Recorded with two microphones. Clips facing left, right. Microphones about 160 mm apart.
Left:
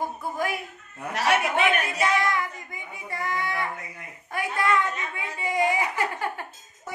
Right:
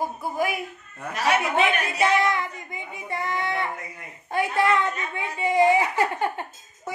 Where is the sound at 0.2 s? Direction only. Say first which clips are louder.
Right 4 dB; 10° right (ahead or behind).